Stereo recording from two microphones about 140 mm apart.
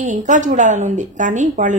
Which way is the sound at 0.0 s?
60° right (ahead or behind).